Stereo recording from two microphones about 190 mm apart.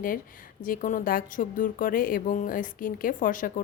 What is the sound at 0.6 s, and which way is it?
A woman's voice, 45° left (ahead or behind).